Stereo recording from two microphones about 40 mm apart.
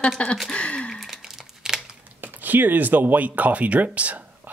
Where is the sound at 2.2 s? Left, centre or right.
Right.